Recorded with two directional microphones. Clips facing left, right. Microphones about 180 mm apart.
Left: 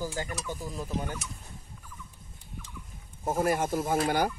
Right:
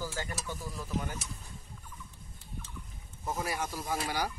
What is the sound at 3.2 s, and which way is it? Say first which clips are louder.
Speech: left 8 dB; 50° left (ahead or behind).